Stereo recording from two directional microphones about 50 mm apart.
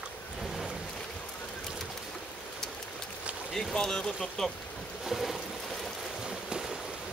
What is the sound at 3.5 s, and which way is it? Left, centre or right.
Speech, centre.